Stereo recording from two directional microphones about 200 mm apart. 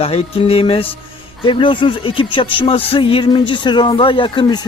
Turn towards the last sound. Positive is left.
turn(degrees=25)  # may be behind; listen again after turning